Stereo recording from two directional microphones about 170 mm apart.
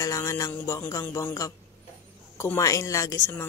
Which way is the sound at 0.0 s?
20° left (ahead or behind).